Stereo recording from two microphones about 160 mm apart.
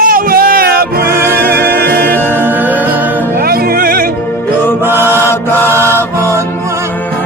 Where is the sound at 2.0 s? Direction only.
10° left (ahead or behind).